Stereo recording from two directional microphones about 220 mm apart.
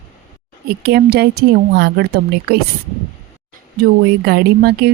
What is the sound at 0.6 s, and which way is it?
A woman's voice, 45° right (ahead or behind).